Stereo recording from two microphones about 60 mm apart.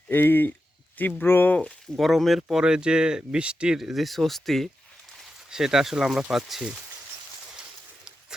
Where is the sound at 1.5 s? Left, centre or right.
Centre.